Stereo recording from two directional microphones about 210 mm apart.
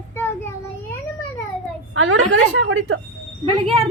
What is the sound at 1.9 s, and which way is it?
A woman's voice, 70° right (ahead or behind).